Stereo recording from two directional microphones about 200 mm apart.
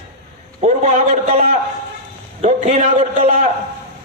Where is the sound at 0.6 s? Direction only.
35° right (ahead or behind).